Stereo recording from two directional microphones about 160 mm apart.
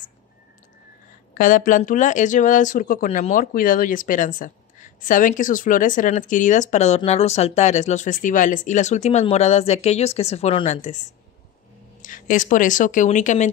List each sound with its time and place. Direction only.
1.3 s speech: 60° left (ahead or behind)